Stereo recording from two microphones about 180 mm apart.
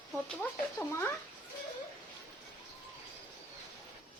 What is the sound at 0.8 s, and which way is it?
Speech, 15° left (ahead or behind).